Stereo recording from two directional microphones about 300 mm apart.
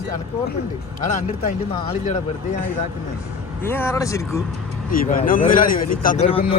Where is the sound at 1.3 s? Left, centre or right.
Left.